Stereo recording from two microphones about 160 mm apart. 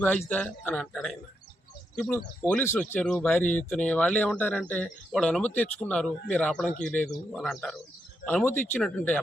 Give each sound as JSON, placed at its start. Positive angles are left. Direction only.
{"t": 0.3, "sound": "speech", "side_deg": 10}